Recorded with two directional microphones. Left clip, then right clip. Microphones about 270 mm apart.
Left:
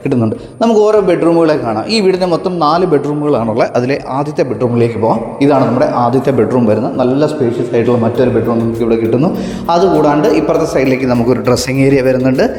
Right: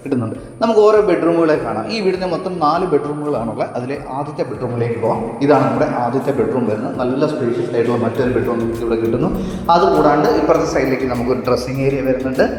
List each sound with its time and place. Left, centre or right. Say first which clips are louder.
0.6 s a man's voice: left 2 dB; left
8.9 s a man's voice: left 5 dB; left